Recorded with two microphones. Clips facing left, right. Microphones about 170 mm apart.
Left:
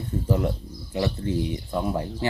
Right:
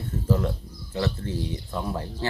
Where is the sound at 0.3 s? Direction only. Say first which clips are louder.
Even; 15° left (ahead or behind).